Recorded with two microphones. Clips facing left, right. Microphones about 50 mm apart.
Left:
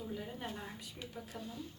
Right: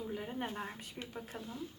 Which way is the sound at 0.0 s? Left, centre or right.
Right.